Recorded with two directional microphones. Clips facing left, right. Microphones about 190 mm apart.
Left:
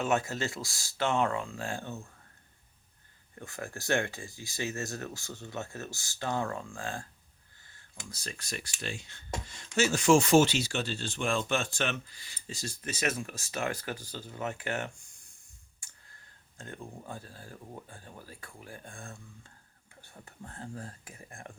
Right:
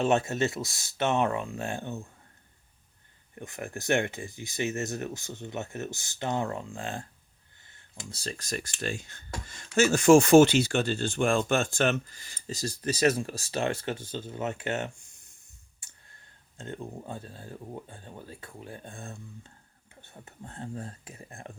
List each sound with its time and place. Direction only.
0.0 s speech: 25° right (ahead or behind)
3.3 s speech: 20° right (ahead or behind)
15.8 s clicking: 25° right (ahead or behind)
16.6 s speech: 20° right (ahead or behind)